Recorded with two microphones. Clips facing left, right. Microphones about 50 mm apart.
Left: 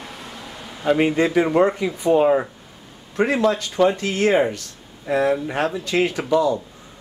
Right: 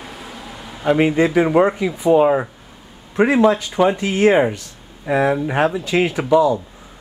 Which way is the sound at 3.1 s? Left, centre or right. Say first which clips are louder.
Right 5 dB; centre.